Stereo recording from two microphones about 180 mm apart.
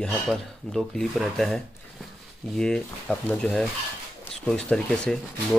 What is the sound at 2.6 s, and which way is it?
Speech, 5° left (ahead or behind).